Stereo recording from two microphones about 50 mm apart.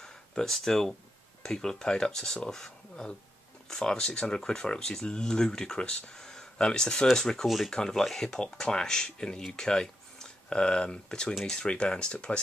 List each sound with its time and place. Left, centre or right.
0.0 s speech: centre
6.1 s a sound: centre
7.1 s speech: centre
7.4 s speech: centre
7.7 s speech: centre